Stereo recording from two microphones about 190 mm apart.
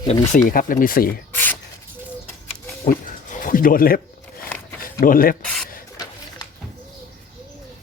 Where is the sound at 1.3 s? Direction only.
10° left (ahead or behind).